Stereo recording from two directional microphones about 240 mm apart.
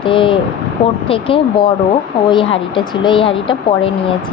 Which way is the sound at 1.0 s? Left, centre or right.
Left.